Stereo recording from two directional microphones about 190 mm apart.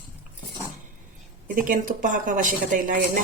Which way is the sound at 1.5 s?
45° right (ahead or behind).